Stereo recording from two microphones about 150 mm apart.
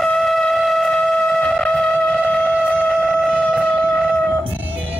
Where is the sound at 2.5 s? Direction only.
Centre (ahead or behind).